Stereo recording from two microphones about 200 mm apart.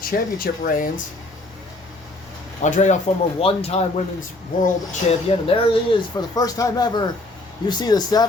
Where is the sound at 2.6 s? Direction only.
35° left (ahead or behind).